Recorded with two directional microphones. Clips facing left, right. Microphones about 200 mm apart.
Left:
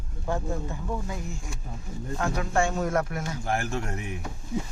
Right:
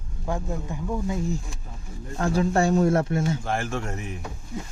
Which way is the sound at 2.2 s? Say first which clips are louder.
Right 4 dB; 30° right (ahead or behind).